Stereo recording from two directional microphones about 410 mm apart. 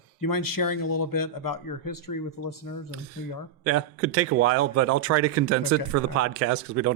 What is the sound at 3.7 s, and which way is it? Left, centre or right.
Speech, right.